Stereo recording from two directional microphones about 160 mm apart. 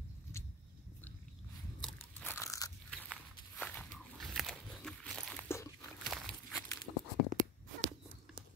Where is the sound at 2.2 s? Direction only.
15° left (ahead or behind).